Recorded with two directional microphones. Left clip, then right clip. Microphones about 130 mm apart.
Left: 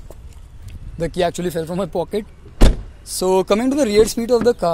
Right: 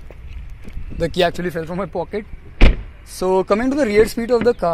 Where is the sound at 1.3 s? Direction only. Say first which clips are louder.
Left 1 dB; 25° left (ahead or behind).